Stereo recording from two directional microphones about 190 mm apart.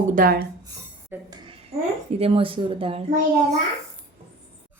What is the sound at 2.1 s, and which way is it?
Speech, 30° right (ahead or behind).